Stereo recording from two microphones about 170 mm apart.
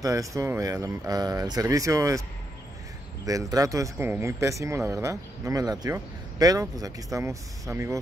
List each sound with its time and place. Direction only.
0.0 s speech: 20° right (ahead or behind)
3.3 s speech: 20° right (ahead or behind)